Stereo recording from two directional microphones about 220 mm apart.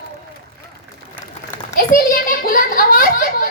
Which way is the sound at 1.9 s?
40° left (ahead or behind).